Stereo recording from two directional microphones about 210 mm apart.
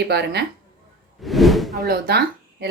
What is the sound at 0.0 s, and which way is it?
Speech, 50° right (ahead or behind).